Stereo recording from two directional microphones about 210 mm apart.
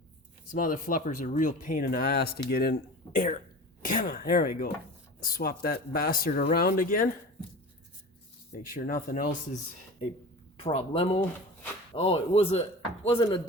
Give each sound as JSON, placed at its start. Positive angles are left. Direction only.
{"t": 0.5, "sound": "speech", "side_deg": 40}
{"t": 8.7, "sound": "speech", "side_deg": 40}
{"t": 10.6, "sound": "speech", "side_deg": 25}